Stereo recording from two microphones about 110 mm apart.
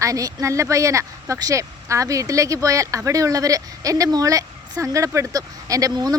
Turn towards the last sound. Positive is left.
turn(degrees=-35)  # may be behind; listen again after turning